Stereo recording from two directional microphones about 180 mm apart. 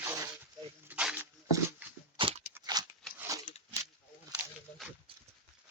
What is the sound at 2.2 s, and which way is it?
Crunch, 30° right (ahead or behind).